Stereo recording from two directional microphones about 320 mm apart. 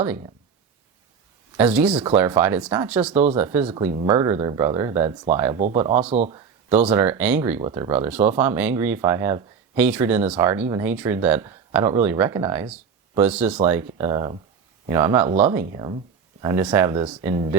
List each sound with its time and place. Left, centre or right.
1.5 s speech: centre
1.9 s speech: centre
6.7 s speech: centre